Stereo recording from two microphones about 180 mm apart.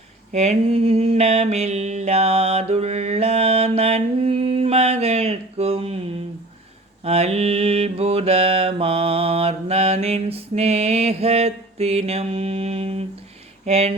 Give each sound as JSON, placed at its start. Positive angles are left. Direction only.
{"t": 0.3, "sound": "mantra", "side_deg": -35}
{"t": 7.0, "sound": "mantra", "side_deg": -35}
{"t": 13.7, "sound": "speech", "side_deg": -35}